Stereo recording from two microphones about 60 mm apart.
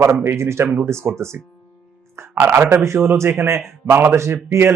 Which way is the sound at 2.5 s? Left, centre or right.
Right.